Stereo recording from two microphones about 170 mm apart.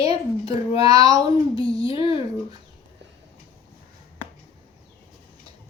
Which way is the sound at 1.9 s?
35° left (ahead or behind).